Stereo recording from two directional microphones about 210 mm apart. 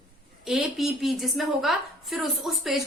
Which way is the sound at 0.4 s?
Centre (ahead or behind).